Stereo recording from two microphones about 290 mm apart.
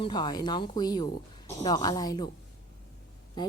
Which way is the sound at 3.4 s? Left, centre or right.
Centre.